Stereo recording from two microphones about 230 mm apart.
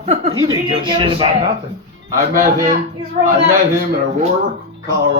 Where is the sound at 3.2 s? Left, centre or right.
Right.